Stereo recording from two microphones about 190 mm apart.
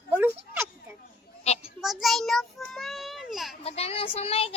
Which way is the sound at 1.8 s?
Centre (ahead or behind).